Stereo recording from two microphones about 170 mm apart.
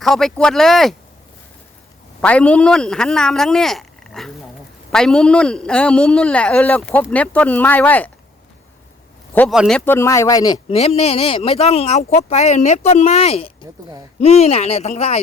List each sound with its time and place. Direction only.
0.0 s a man's voice: centre (ahead or behind)
2.2 s a man's voice: 10° left (ahead or behind)
9.5 s a man's voice: centre (ahead or behind)
9.8 s speech: 15° left (ahead or behind)
10.8 s speech: 35° left (ahead or behind)